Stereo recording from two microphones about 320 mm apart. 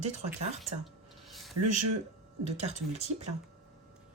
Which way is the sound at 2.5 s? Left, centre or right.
Centre.